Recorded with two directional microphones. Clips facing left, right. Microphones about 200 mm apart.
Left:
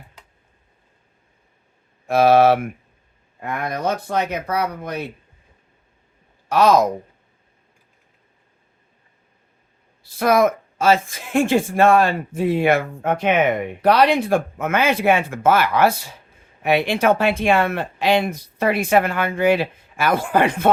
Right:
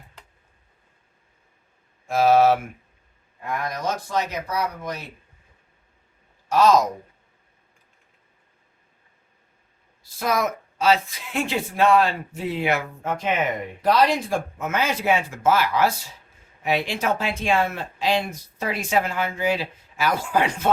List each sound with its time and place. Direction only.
2.0 s speech: 65° left (ahead or behind)
6.5 s speech: 65° left (ahead or behind)
10.0 s speech: 60° left (ahead or behind)